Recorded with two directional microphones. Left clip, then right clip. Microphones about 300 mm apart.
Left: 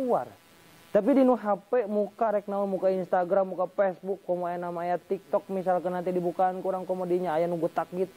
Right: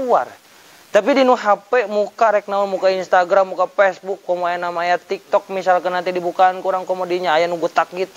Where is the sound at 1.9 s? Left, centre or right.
Right.